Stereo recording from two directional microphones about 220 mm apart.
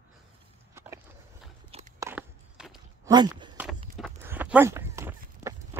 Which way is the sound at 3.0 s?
20° right (ahead or behind).